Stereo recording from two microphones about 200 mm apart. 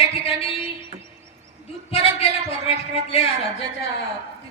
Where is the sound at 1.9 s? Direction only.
30° left (ahead or behind).